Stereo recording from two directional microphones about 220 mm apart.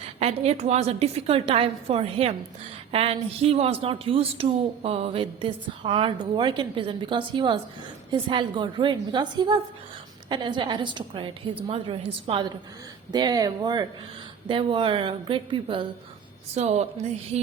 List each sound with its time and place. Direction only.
0.0 s speech: 30° right (ahead or behind)